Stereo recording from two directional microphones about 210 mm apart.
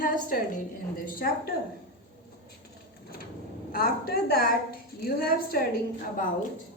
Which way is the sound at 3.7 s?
45° left (ahead or behind).